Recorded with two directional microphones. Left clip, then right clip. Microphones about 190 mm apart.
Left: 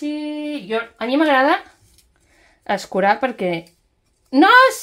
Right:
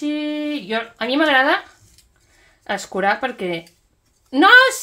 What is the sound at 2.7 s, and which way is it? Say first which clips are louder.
A woman's voice: left 2 dB; 40° left (ahead or behind).